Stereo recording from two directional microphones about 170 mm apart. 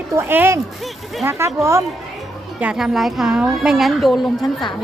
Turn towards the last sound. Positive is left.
turn(degrees=0)  # may be behind; listen again after turning